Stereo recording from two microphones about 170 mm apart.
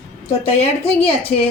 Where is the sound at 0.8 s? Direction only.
35° left (ahead or behind).